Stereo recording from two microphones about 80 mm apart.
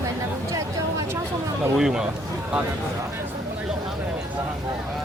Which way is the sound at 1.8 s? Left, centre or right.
Centre.